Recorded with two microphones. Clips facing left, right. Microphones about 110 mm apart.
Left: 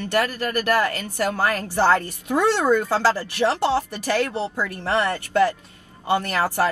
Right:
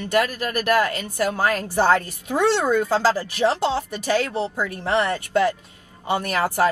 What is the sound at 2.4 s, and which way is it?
Speech, 15° left (ahead or behind).